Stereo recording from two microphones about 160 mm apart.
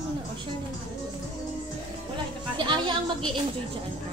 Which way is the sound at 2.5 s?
30° right (ahead or behind).